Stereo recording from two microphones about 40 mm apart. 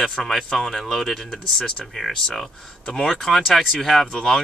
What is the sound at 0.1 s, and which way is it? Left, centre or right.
Speech, centre.